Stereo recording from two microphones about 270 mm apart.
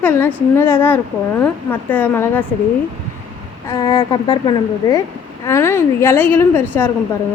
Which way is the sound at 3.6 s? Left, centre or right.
Centre.